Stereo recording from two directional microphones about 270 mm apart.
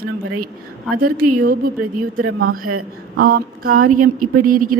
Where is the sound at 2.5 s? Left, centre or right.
Right.